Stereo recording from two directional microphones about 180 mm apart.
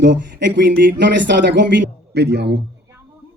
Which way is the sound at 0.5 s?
80° right.